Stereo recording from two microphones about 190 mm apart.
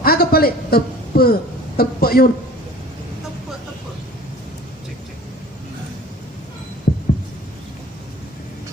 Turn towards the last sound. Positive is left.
turn(degrees=55)  # may be behind; listen again after turning